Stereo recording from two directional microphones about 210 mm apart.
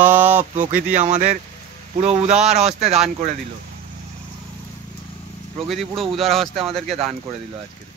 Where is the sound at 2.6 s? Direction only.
30° right (ahead or behind).